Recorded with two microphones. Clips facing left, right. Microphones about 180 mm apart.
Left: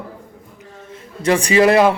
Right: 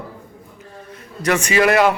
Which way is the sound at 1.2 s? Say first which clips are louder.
Left 3 dB; 30° left (ahead or behind).